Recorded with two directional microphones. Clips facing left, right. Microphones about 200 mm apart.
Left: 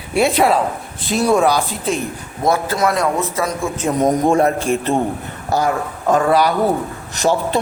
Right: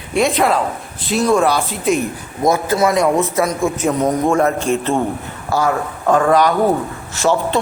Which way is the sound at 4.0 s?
20° left (ahead or behind).